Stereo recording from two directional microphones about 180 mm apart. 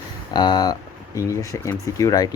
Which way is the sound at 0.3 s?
25° left (ahead or behind).